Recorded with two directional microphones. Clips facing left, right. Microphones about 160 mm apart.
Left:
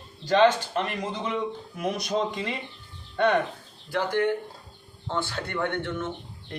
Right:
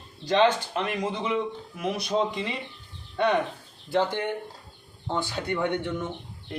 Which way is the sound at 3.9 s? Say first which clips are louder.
Left 1 dB; 20° right (ahead or behind).